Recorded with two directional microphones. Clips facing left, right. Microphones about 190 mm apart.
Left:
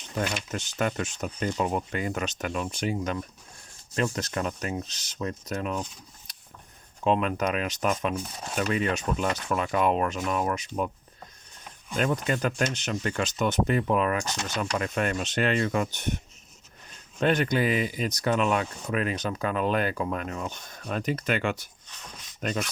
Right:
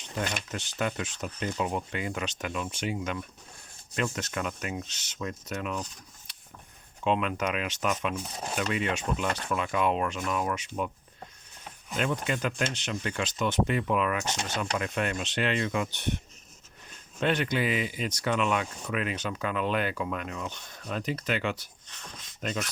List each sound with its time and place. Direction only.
0.5 s speech: 45° left (ahead or behind)
7.0 s speech: 40° left (ahead or behind)
11.9 s speech: 45° left (ahead or behind)
17.2 s speech: 45° left (ahead or behind)